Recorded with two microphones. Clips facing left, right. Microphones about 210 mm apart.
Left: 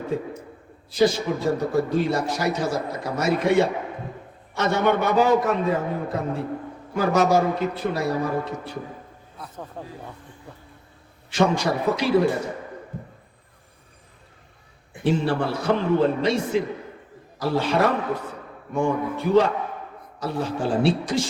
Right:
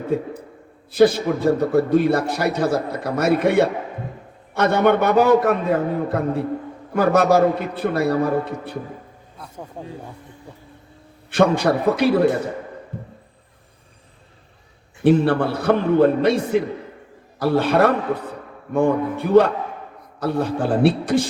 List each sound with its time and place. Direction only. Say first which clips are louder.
0.9 s a man's voice: right 5 dB; 55° right (ahead or behind)
9.8 s speech: right 4 dB; 10° right (ahead or behind)
11.3 s a man's voice: right 4 dB; 55° right (ahead or behind)
15.0 s a man's voice: right 6 dB; 55° right (ahead or behind)